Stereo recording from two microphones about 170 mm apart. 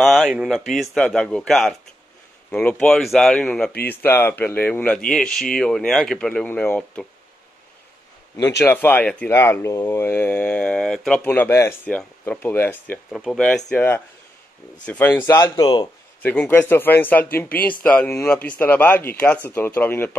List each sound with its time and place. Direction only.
0.0 s speech: centre (ahead or behind)
8.4 s speech: 20° left (ahead or behind)
13.1 s speech: centre (ahead or behind); by 15.9 s 25° left (ahead or behind)
16.2 s speech: 10° left (ahead or behind)